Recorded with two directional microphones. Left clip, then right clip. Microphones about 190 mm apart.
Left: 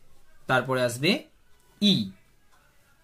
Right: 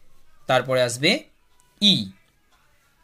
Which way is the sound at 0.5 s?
20° right (ahead or behind).